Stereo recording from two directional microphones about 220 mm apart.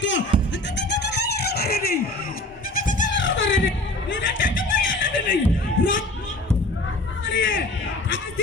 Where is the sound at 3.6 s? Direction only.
60° left (ahead or behind).